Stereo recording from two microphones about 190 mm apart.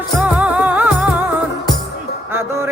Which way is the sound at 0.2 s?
5° right (ahead or behind).